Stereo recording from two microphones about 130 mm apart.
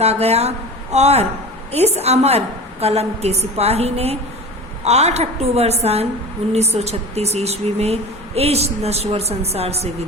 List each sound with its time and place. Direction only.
0.0 s a woman's voice: 55° right (ahead or behind)